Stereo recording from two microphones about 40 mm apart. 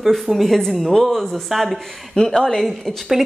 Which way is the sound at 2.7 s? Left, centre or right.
Centre.